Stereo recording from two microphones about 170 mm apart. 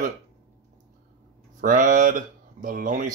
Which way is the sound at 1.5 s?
50° right (ahead or behind).